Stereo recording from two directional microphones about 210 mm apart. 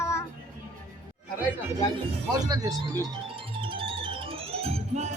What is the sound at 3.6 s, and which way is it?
Music, 25° right (ahead or behind).